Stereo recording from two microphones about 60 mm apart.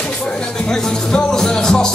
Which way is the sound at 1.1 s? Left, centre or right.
Centre.